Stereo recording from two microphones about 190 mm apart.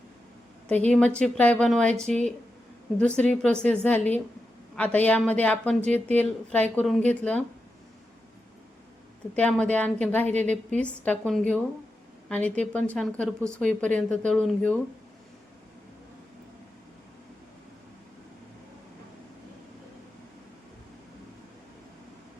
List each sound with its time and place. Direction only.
0.7 s a woman's voice: 5° left (ahead or behind)
3.2 s speech: 5° left (ahead or behind)
9.3 s speech: 5° left (ahead or behind)
10.4 s a woman's voice: 40° right (ahead or behind)
10.8 s a woman's voice: 5° left (ahead or behind)